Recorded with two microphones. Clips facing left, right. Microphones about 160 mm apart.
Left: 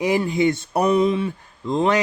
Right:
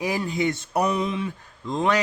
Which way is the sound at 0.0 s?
20° left (ahead or behind).